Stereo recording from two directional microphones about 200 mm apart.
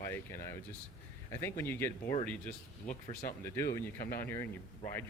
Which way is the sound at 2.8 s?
45° left (ahead or behind).